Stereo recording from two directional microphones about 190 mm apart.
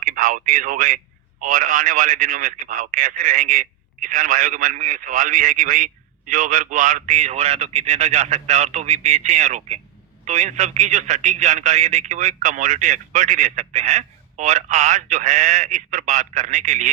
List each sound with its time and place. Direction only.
0.0 s a man's voice: 45° right (ahead or behind)